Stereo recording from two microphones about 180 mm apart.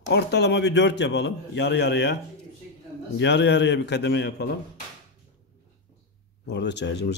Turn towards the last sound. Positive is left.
turn(degrees=70)  # may be behind; listen again after turning